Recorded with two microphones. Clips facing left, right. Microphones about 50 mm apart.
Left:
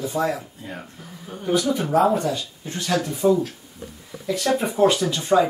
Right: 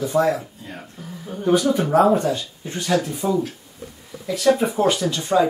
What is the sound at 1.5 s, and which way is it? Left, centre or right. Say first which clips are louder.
Speech: right 3 dB; right.